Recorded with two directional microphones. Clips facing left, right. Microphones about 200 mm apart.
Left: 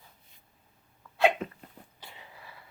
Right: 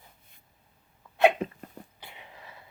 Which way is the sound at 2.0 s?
20° right (ahead or behind).